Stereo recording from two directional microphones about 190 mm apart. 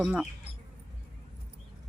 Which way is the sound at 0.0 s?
5° right (ahead or behind).